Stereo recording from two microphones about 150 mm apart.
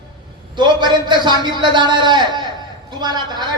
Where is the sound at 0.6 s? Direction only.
30° right (ahead or behind).